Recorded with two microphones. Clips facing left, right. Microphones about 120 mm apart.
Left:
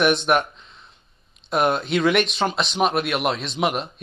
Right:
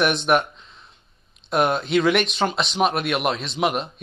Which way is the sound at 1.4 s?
Centre (ahead or behind).